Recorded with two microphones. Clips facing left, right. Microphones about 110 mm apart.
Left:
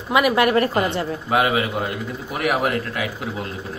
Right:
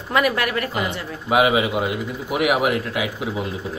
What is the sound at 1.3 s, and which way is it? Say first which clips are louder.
A man's voice: right 3 dB; 15° right (ahead or behind).